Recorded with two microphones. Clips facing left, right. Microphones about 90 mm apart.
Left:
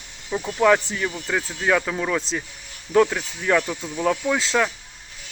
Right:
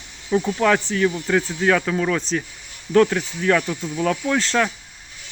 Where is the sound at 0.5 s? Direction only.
5° left (ahead or behind).